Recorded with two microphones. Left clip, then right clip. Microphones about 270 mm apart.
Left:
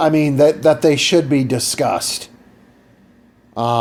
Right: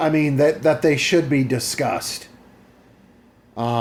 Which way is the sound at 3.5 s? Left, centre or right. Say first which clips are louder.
Left 6 dB; left.